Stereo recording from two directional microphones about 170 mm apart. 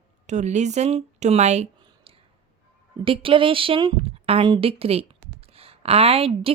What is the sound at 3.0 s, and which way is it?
Speech, 30° right (ahead or behind).